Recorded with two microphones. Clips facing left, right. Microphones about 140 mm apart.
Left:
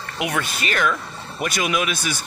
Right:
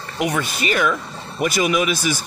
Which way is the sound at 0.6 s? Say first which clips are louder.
Right 4 dB; 10° right (ahead or behind).